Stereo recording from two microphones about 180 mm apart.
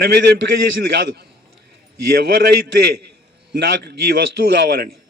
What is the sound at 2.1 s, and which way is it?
A man's voice, 60° right (ahead or behind).